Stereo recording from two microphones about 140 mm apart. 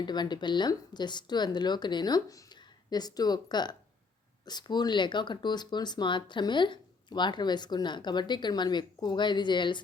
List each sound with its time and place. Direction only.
0.0 s speech: 30° left (ahead or behind)